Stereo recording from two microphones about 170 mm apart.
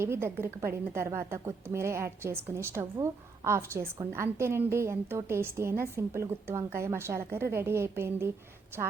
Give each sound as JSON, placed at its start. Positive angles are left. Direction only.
{"t": 0.0, "sound": "a woman's voice", "side_deg": -15}